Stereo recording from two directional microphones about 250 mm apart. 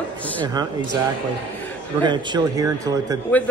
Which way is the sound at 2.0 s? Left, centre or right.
Centre.